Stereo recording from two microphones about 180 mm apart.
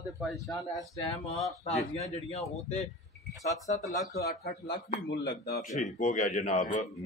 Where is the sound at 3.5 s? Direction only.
20° left (ahead or behind).